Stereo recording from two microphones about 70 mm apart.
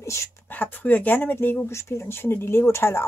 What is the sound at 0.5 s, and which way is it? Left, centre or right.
Speech, left.